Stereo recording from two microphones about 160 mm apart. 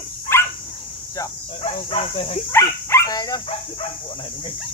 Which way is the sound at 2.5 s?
15° left (ahead or behind).